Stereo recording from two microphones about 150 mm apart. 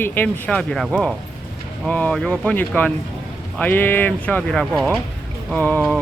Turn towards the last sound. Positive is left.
turn(degrees=10)  # may be behind; listen again after turning